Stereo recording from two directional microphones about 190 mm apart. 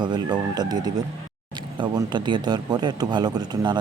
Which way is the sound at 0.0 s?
25° right (ahead or behind).